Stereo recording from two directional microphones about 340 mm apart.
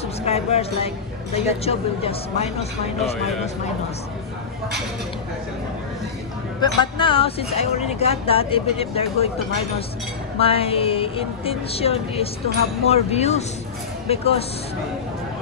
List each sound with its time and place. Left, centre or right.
0.2 s speech: centre
6.6 s speech: centre
10.4 s speech: centre